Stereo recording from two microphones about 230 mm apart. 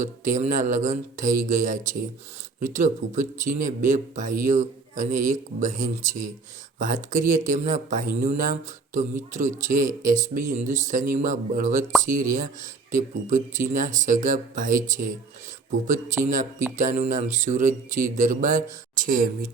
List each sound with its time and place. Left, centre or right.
0.0 s speech: right
16.3 s speech: right